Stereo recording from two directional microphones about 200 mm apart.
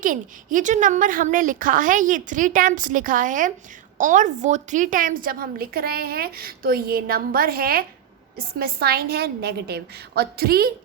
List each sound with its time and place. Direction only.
0.0 s a woman's voice: 40° right (ahead or behind)